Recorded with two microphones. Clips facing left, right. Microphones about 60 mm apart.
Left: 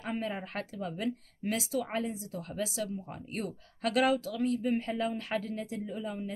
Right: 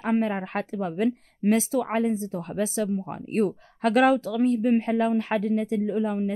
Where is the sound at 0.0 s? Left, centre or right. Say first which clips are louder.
Right 10 dB; right.